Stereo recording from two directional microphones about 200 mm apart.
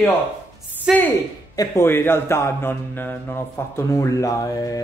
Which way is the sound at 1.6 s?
10° left (ahead or behind).